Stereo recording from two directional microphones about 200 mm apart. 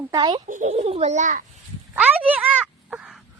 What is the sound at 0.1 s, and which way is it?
Speech, 20° right (ahead or behind).